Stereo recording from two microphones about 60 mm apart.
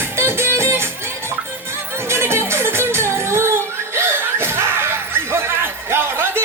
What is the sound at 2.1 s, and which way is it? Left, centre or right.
Music, right.